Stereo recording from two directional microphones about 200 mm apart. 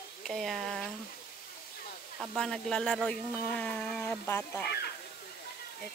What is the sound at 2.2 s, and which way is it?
Speech, centre (ahead or behind).